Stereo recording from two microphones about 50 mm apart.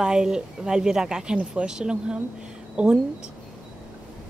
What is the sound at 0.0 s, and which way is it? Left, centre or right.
Speech, centre.